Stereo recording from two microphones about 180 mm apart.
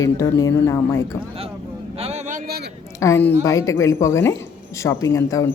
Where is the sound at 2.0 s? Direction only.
40° right (ahead or behind).